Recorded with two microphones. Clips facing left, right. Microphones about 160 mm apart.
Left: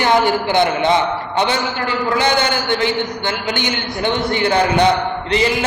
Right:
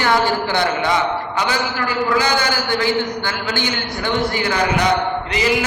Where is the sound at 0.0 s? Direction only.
20° left (ahead or behind).